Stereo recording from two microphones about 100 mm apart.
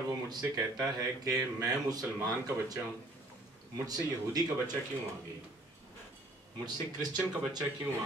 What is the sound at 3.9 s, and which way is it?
Speech, 40° right (ahead or behind).